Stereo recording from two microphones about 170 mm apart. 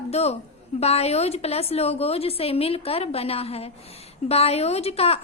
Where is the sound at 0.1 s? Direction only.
40° left (ahead or behind).